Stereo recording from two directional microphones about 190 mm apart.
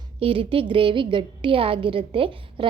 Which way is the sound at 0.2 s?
30° right (ahead or behind).